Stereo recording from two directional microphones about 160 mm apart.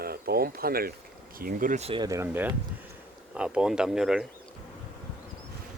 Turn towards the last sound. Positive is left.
turn(degrees=-5)  # may be behind; listen again after turning